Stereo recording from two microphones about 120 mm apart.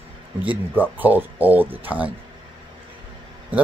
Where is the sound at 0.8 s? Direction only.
15° right (ahead or behind).